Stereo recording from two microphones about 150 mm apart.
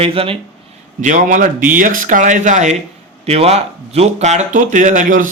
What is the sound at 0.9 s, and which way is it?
A man's voice, 55° right (ahead or behind).